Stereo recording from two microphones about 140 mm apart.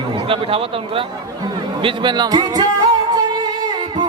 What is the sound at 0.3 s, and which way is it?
A man's voice, 40° right (ahead or behind).